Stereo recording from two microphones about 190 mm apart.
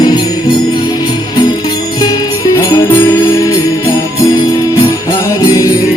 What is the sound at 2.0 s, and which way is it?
Music, 20° left (ahead or behind).